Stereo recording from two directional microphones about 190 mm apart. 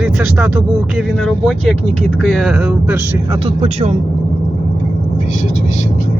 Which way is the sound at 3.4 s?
30° right (ahead or behind).